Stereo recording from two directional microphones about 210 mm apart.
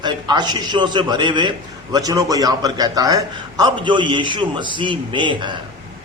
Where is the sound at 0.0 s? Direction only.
20° right (ahead or behind).